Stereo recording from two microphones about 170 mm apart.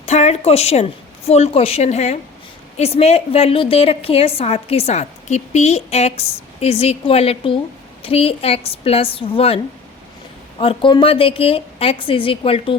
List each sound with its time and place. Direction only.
0.0 s a woman's voice: 40° left (ahead or behind)
10.6 s a woman's voice: 30° left (ahead or behind)